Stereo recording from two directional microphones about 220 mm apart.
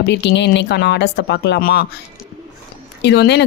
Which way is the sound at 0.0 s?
50° left (ahead or behind).